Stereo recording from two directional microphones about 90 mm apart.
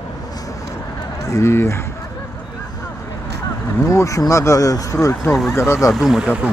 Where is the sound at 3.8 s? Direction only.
35° left (ahead or behind).